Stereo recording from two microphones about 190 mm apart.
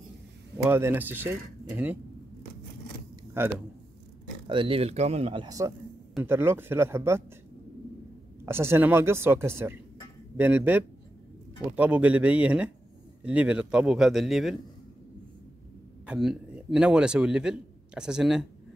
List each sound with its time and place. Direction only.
0.7 s speech: 10° right (ahead or behind)
3.3 s speech: 10° right (ahead or behind)
4.5 s speech: 25° right (ahead or behind)
8.5 s a man's voice: 10° right (ahead or behind)
16.1 s a man's voice: 5° right (ahead or behind)